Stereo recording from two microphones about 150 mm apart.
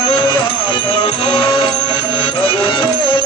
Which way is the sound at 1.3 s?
35° left (ahead or behind).